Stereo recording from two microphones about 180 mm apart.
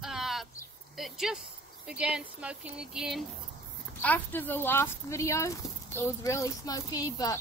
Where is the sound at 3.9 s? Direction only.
10° left (ahead or behind).